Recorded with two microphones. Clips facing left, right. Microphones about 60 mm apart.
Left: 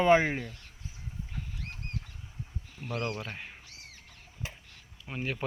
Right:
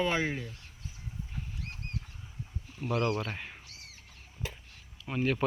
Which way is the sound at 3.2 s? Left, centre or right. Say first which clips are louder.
Right 4 dB; centre.